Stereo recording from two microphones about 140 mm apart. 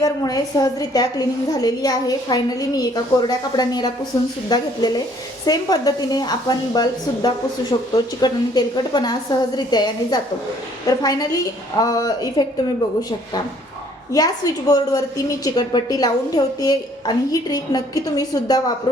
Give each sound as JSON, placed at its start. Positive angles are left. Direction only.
{"t": 0.0, "sound": "a woman's voice", "side_deg": 25}